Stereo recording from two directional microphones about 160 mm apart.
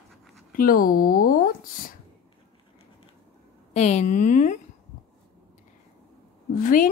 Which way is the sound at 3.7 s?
45° left (ahead or behind).